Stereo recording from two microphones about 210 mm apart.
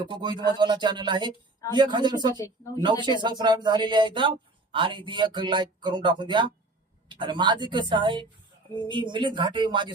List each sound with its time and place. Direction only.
0.0 s speech: 20° right (ahead or behind)